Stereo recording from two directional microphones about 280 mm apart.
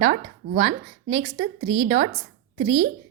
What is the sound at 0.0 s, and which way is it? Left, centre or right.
Speech, right.